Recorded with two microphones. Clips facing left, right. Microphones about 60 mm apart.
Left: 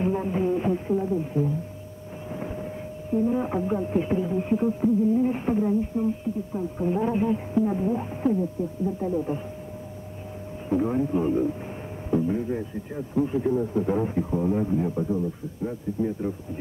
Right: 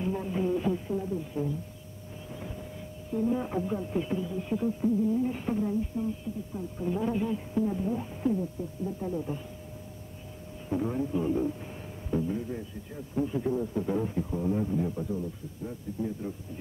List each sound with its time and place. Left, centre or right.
0.0 s a sound: left
2.3 s a man's voice: left
10.7 s a man's voice: left